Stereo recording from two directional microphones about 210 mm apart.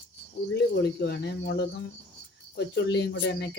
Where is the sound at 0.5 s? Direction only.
50° left (ahead or behind).